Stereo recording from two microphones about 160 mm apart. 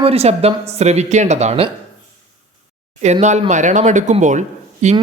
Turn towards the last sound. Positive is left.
turn(degrees=-50)  # may be behind; listen again after turning